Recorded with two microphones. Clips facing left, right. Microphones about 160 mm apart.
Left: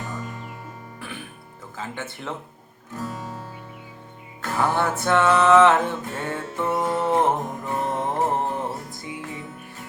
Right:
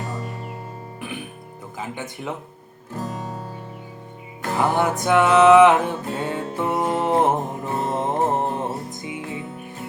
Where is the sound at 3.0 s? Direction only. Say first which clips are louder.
Right 2 dB; 40° right (ahead or behind).